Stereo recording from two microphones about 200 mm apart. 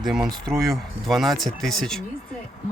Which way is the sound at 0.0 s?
Centre (ahead or behind).